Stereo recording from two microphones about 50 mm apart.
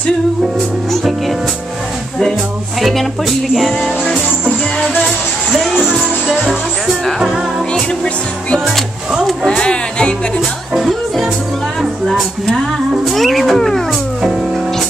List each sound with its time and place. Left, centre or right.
2.8 s speech: centre
5.7 s speech: centre
9.6 s music: centre
10.7 s music: centre